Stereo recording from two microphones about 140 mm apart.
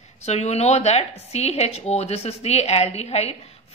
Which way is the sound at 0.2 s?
50° left (ahead or behind).